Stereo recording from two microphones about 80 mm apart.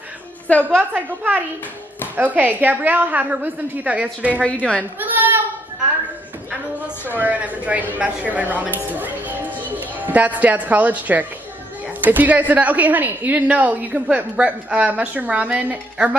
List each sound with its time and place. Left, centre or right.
0.5 s a woman's voice: centre
0.7 s speech: right
4.4 s a woman's voice: centre
4.9 s a sound: right
7.1 s speech: right
9.7 s a sound: right
10.4 s a woman's voice: centre